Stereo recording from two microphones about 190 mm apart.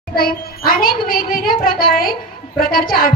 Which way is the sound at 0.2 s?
50° left (ahead or behind).